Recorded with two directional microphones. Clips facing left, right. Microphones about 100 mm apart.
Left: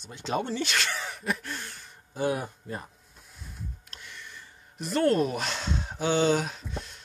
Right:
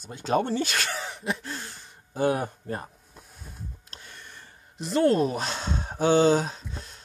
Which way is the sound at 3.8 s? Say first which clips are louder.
Even; 35° right (ahead or behind).